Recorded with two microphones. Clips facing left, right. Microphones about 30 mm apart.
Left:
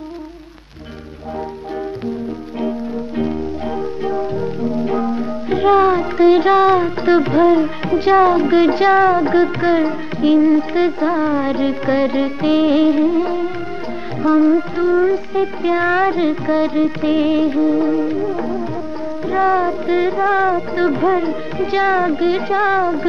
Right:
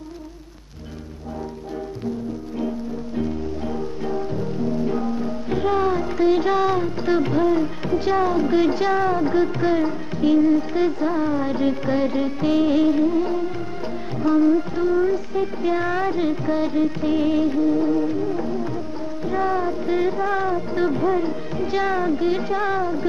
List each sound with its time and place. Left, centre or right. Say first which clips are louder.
3.2 s music: left 4 dB; left